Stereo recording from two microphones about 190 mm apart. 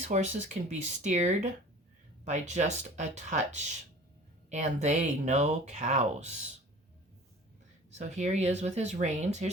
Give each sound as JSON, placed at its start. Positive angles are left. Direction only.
{"t": 0.0, "sound": "speech", "side_deg": -40}
{"t": 7.9, "sound": "speech", "side_deg": -35}